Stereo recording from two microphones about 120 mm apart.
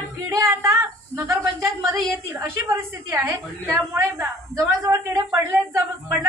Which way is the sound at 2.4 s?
20° right (ahead or behind).